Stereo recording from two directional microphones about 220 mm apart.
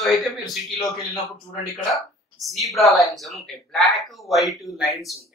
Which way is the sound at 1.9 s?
Centre (ahead or behind).